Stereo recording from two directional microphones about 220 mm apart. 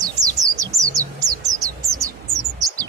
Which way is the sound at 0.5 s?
15° right (ahead or behind).